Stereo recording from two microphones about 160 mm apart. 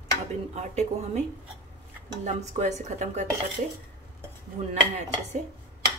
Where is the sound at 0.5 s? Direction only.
45° right (ahead or behind).